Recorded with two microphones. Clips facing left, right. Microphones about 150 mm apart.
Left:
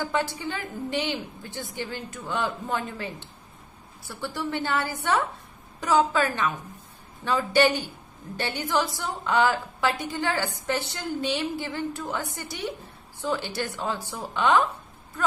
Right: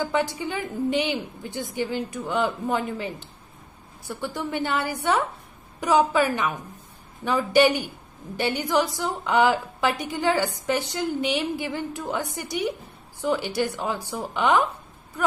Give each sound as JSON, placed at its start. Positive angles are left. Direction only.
{"t": 0.0, "sound": "a woman's voice", "side_deg": -15}